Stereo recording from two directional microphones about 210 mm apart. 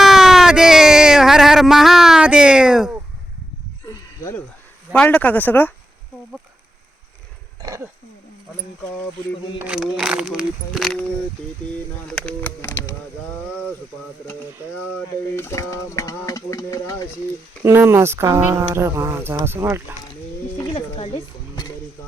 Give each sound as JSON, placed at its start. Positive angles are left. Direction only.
{"t": 0.0, "sound": "a sound", "side_deg": 0}
{"t": 3.8, "sound": "a sound", "side_deg": 15}
{"t": 4.9, "sound": "speech", "side_deg": 5}
{"t": 7.6, "sound": "speech", "side_deg": -15}
{"t": 9.6, "sound": "speech", "side_deg": -5}
{"t": 15.4, "sound": "speech", "side_deg": 10}
{"t": 17.6, "sound": "speech", "side_deg": -10}
{"t": 20.6, "sound": "speech", "side_deg": 25}